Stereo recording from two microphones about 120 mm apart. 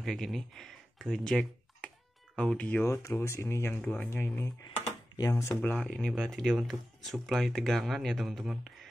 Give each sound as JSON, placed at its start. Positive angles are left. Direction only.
{"t": 0.0, "sound": "speech", "side_deg": 5}
{"t": 3.2, "sound": "speech", "side_deg": 25}
{"t": 5.8, "sound": "speech", "side_deg": 5}